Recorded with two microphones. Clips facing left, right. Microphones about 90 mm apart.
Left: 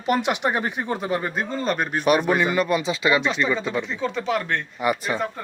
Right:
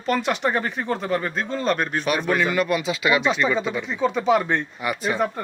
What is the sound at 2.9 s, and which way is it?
Speech, 10° right (ahead or behind).